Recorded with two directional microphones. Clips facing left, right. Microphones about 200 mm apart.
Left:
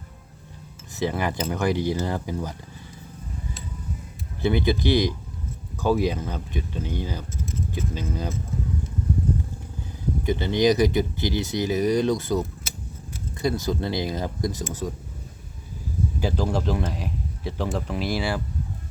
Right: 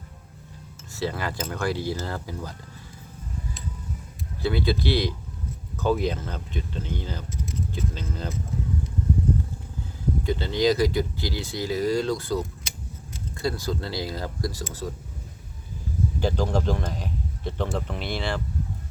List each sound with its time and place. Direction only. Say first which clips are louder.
0.9 s speech: left 3 dB; 20° left (ahead or behind)
4.4 s speech: left 3 dB; 20° left (ahead or behind)
10.2 s speech: left 3 dB; 20° left (ahead or behind)
16.2 s a man's voice: even; 5° left (ahead or behind)